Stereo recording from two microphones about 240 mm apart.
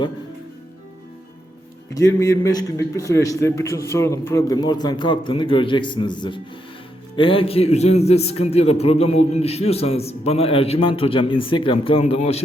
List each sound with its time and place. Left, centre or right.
1.9 s a man's voice: centre